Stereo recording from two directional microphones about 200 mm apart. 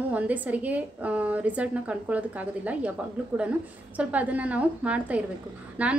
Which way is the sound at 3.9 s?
5° right (ahead or behind).